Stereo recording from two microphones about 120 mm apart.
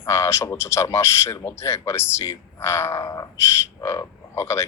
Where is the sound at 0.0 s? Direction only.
20° left (ahead or behind).